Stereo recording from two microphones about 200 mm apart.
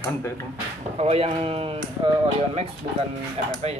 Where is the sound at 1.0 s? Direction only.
30° right (ahead or behind).